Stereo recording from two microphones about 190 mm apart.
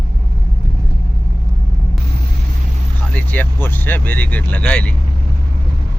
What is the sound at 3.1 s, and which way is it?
Speech, 10° left (ahead or behind).